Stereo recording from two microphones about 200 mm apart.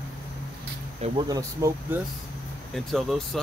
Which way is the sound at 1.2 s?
15° right (ahead or behind).